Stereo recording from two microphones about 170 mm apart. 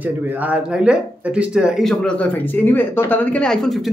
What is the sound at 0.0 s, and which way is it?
Speech, 10° right (ahead or behind).